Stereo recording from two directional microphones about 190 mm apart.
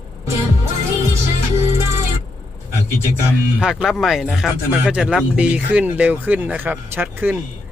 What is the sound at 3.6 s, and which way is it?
Speech, 5° right (ahead or behind).